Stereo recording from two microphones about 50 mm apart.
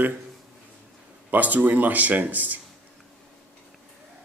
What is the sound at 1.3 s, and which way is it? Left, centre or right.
Speech, right.